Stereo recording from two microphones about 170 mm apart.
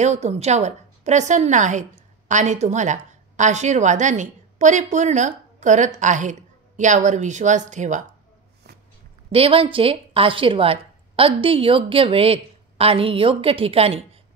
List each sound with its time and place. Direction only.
0.0 s a woman's voice: 40° right (ahead or behind)
8.6 s a sound: 75° right (ahead or behind)
9.3 s a woman's voice: 35° right (ahead or behind)